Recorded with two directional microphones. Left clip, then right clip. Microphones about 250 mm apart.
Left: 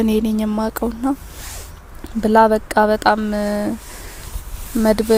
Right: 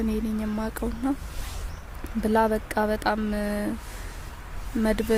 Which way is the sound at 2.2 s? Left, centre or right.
Centre.